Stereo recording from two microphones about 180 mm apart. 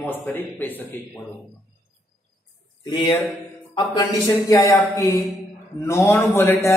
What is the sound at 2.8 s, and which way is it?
Speech, 25° left (ahead or behind).